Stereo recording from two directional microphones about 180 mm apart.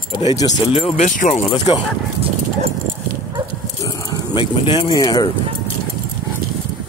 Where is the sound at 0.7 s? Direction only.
30° left (ahead or behind).